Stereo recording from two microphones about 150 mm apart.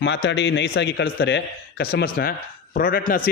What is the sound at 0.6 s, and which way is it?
A man's voice, 85° left.